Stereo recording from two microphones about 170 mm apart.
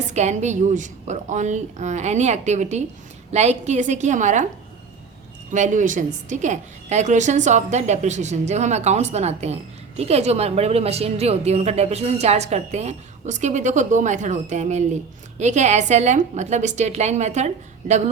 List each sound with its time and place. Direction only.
0.1 s a woman's voice: 40° right (ahead or behind)
5.5 s a woman's voice: 45° right (ahead or behind)